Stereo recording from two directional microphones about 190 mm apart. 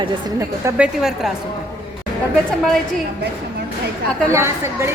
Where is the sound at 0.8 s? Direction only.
Centre (ahead or behind).